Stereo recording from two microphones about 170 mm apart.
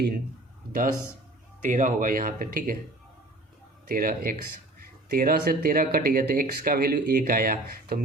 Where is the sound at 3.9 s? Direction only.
60° right (ahead or behind).